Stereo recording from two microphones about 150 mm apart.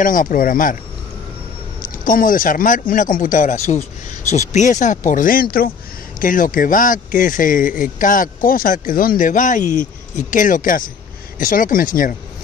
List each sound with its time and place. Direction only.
0.0 s speech: 65° left (ahead or behind)
1.8 s speech: 65° left (ahead or behind)
6.1 s speech: 65° left (ahead or behind)